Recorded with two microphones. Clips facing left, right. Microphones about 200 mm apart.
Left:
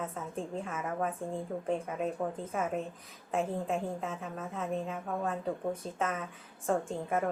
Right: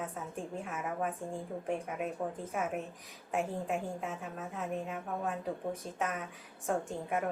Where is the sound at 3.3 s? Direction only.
Centre (ahead or behind).